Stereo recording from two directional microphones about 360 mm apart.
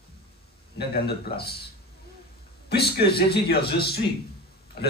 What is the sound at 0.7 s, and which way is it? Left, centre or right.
Speech, left.